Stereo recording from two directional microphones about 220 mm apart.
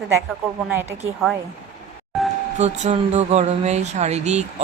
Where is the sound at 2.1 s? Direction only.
Centre (ahead or behind).